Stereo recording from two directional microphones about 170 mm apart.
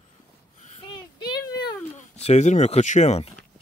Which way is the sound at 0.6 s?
40° left (ahead or behind).